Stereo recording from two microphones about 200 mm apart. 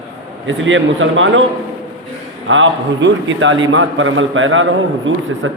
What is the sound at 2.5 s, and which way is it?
A man's voice, 70° right (ahead or behind).